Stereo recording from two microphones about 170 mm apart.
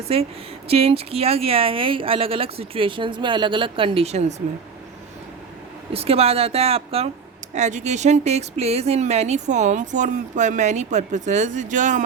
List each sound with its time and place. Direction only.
0.7 s speech: 35° right (ahead or behind)
5.9 s speech: 35° right (ahead or behind)